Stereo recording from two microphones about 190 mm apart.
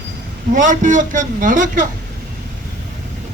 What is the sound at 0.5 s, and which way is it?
A man's voice, 40° right (ahead or behind).